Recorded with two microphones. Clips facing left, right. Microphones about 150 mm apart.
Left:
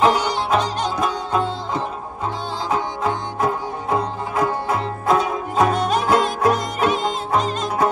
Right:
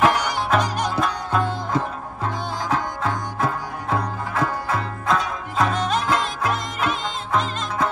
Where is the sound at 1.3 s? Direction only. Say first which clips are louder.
Even; 15° left (ahead or behind).